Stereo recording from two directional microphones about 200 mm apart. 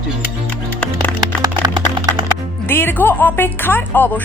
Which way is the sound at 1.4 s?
20° right (ahead or behind).